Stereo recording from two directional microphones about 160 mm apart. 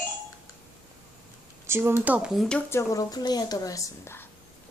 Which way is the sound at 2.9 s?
25° left (ahead or behind).